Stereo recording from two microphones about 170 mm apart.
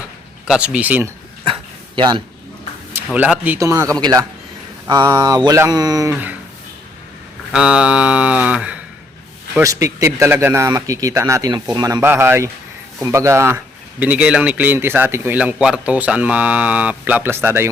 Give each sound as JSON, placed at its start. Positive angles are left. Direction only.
{"t": 0.4, "sound": "a man's voice", "side_deg": -5}
{"t": 2.0, "sound": "speech", "side_deg": -30}
{"t": 2.9, "sound": "a man's voice", "side_deg": -5}
{"t": 7.5, "sound": "a man's voice", "side_deg": -5}